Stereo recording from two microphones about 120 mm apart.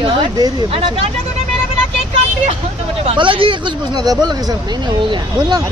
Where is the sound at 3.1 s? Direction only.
45° right (ahead or behind).